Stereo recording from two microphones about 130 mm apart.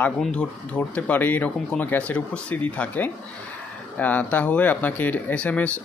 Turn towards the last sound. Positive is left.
turn(degrees=10)  # may be behind; listen again after turning